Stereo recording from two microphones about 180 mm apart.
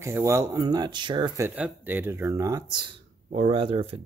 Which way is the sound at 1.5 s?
10° right (ahead or behind).